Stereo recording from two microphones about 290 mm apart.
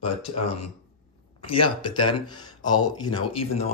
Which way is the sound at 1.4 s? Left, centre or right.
Centre.